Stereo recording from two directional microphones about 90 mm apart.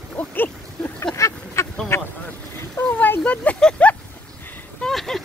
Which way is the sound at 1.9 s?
30° left (ahead or behind).